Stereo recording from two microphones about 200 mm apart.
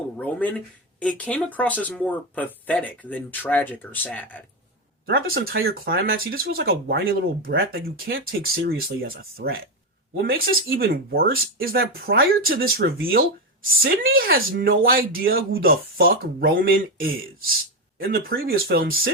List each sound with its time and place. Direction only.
0.2 s speech: 5° left (ahead or behind)
5.0 s speech: 50° right (ahead or behind)